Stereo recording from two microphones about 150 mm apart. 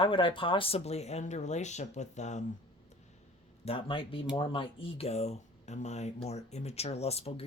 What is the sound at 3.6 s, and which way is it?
Speech, 35° left (ahead or behind).